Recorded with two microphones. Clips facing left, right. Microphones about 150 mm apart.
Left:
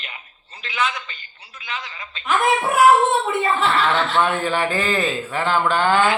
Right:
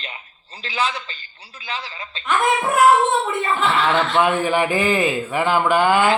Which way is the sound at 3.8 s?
10° right (ahead or behind).